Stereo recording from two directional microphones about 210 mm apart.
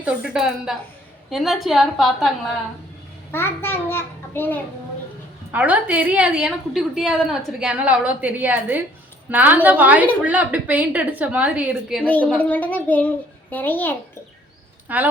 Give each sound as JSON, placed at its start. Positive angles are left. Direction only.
{"t": 0.0, "sound": "a woman's voice", "side_deg": -5}
{"t": 3.3, "sound": "a child's voice", "side_deg": 10}
{"t": 5.5, "sound": "a woman's voice", "side_deg": -5}
{"t": 12.0, "sound": "a child's voice", "side_deg": 5}
{"t": 14.9, "sound": "a woman's voice", "side_deg": -5}